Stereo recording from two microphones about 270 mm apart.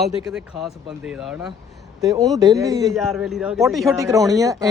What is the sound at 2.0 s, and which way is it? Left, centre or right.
Speech, centre.